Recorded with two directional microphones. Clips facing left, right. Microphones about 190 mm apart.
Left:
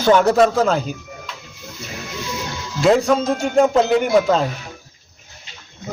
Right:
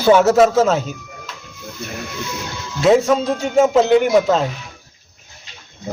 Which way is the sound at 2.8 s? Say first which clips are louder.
Right 1 dB; centre (ahead or behind).